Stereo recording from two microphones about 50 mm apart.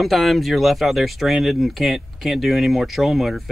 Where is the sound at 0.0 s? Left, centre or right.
Centre.